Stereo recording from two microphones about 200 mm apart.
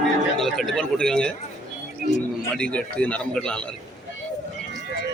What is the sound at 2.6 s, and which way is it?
A man's voice, 5° left (ahead or behind).